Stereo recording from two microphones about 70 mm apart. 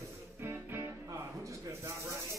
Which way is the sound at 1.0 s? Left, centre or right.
Right.